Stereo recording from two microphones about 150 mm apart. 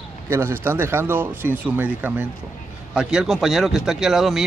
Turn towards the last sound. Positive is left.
turn(degrees=0)  # may be behind; listen again after turning